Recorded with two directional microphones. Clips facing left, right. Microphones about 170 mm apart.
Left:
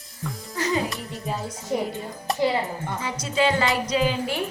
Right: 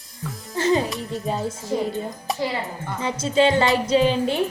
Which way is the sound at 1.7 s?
15° left (ahead or behind).